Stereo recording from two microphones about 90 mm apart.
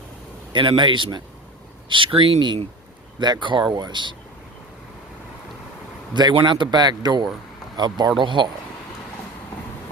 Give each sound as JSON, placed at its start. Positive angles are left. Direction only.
{"t": 0.5, "sound": "speech", "side_deg": -65}
{"t": 3.2, "sound": "speech", "side_deg": -55}
{"t": 6.1, "sound": "speech", "side_deg": -55}
{"t": 8.2, "sound": "speech", "side_deg": -65}